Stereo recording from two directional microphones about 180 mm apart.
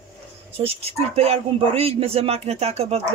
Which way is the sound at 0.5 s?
35° right (ahead or behind).